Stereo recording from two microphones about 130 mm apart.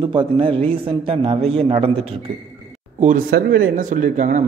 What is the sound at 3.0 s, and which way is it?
Speech, 85° right.